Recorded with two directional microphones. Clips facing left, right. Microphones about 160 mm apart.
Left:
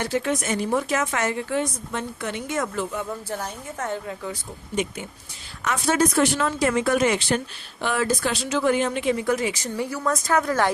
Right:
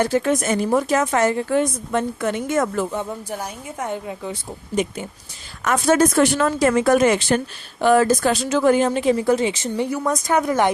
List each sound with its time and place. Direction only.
0.0 s speech: 45° right (ahead or behind)
2.9 s speech: 25° right (ahead or behind)
3.2 s a woman's voice: 10° right (ahead or behind)
4.7 s speech: 40° right (ahead or behind); by 10.7 s 20° right (ahead or behind)